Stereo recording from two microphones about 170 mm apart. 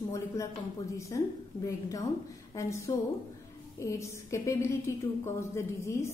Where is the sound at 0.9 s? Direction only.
20° left (ahead or behind).